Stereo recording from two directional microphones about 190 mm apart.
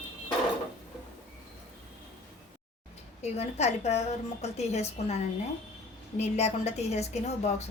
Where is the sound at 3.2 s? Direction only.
35° left (ahead or behind).